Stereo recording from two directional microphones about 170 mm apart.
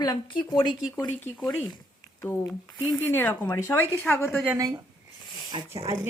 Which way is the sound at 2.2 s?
15° left (ahead or behind).